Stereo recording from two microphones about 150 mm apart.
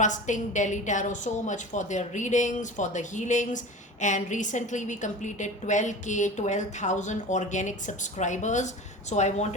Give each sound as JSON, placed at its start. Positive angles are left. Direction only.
{"t": 0.0, "sound": "a woman's voice", "side_deg": 55}